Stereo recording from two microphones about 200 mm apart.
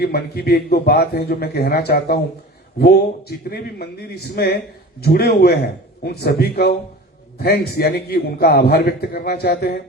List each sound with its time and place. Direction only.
0.0 s a man's voice: 55° left (ahead or behind)